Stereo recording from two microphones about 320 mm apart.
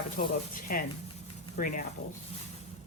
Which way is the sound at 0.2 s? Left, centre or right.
Left.